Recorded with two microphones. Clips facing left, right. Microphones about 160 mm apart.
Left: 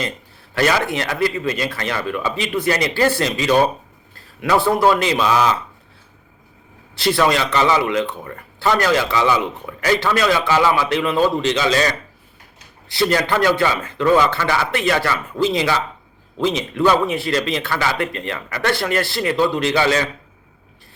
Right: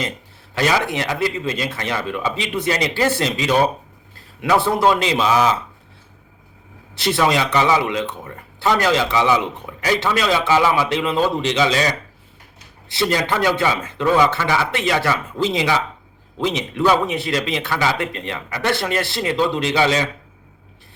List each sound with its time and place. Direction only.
0.5 s speech: 20° right (ahead or behind)
4.1 s a sound: 20° right (ahead or behind)
4.6 s speech: 20° right (ahead or behind)
6.9 s speech: 20° right (ahead or behind)